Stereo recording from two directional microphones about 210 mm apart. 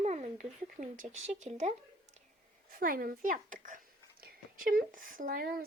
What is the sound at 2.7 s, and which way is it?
A child's voice, 40° right (ahead or behind).